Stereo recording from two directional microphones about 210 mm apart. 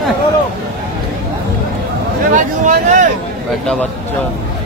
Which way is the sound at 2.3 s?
35° right (ahead or behind).